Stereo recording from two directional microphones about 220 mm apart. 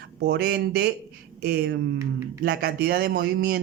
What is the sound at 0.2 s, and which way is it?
Speech, 45° right (ahead or behind).